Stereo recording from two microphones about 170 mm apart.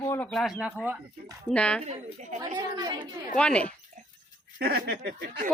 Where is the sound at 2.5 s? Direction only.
25° right (ahead or behind).